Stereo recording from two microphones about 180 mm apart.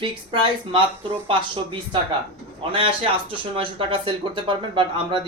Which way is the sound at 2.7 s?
30° right (ahead or behind).